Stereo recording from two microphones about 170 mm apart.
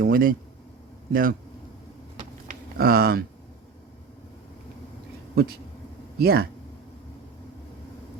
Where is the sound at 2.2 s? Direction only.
55° right (ahead or behind).